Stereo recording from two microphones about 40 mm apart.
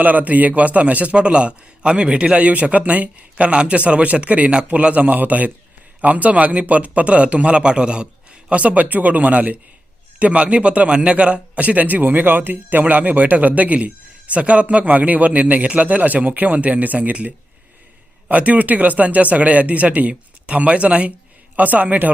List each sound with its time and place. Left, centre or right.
0.0 s a man's voice: right
21.5 s a man's voice: right